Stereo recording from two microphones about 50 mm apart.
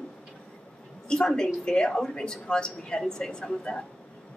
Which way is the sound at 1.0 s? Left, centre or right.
Centre.